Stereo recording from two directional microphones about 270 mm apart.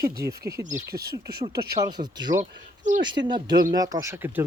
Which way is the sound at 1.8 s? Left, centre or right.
Centre.